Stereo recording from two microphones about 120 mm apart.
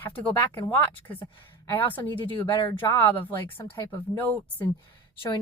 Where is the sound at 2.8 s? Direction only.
20° left (ahead or behind).